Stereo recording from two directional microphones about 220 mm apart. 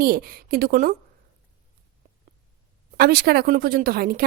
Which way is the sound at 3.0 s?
45° right (ahead or behind).